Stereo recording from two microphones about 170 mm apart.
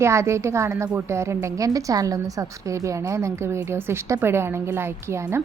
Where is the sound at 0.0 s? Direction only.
15° right (ahead or behind).